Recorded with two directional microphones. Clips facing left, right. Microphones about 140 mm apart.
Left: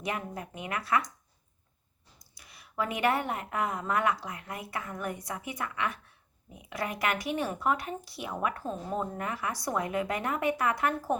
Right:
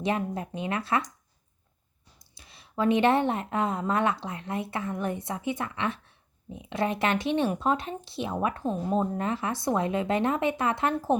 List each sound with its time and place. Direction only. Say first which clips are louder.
0.0 s speech: right 7 dB; 25° right (ahead or behind)
2.1 s speech: right 1 dB; 25° right (ahead or behind)